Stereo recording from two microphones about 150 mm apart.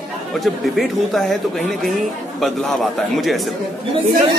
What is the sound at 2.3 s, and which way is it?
Speech, centre (ahead or behind).